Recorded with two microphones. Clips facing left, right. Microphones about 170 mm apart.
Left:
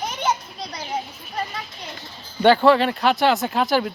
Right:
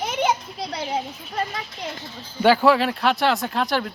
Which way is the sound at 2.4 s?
5° right (ahead or behind).